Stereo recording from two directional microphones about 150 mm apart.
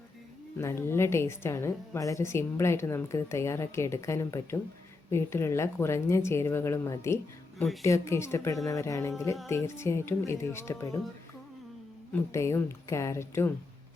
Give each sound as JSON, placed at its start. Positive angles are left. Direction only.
{"t": 0.6, "sound": "a woman's voice", "side_deg": 15}
{"t": 12.1, "sound": "a woman's voice", "side_deg": 20}